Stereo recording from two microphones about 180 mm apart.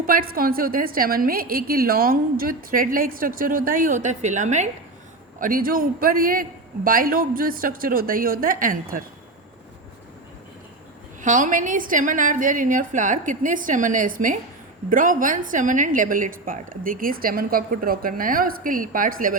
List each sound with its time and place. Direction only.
0.0 s a woman's voice: 50° right (ahead or behind)
5.4 s a woman's voice: 50° right (ahead or behind)
11.2 s a woman's voice: 45° right (ahead or behind)